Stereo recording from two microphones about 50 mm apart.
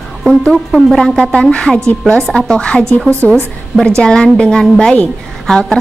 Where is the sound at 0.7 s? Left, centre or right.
Centre.